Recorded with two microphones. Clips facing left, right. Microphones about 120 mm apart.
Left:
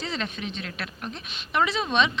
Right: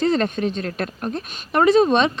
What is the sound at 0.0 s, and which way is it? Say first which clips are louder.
Speech: right 12 dB; 50° right (ahead or behind).